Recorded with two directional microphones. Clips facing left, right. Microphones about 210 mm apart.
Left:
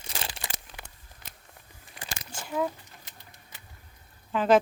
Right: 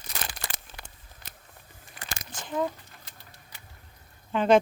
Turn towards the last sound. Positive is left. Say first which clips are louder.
# right 1 dB
turn(degrees=0)  # may be behind; listen again after turning